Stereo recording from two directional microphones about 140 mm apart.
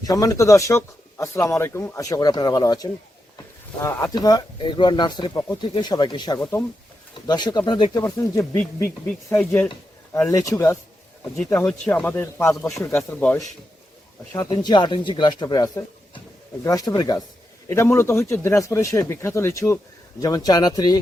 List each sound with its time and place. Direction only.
0.0 s speech: 25° left (ahead or behind)
4.1 s speech: 25° left (ahead or behind)
11.6 s speech: 15° left (ahead or behind)
14.3 s speech: 30° left (ahead or behind)